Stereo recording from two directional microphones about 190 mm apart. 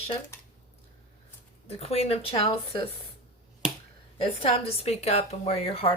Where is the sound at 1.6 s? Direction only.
35° left (ahead or behind).